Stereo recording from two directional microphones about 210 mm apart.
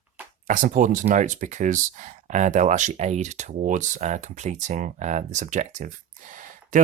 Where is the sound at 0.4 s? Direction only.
40° right (ahead or behind).